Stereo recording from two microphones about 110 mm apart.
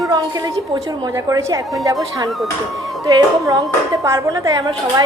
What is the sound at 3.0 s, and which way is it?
A woman's voice, 35° right (ahead or behind).